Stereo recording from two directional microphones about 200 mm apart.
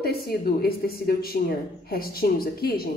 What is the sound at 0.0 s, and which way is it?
A woman's voice, 50° left (ahead or behind).